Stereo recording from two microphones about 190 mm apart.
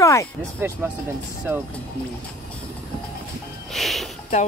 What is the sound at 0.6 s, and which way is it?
Speech, 10° right (ahead or behind).